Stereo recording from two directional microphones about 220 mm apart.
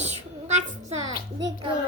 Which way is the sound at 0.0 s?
30° right (ahead or behind).